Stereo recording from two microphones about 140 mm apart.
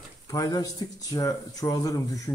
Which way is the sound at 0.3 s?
25° left (ahead or behind).